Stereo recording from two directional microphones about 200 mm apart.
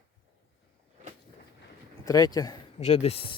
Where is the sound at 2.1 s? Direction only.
20° left (ahead or behind).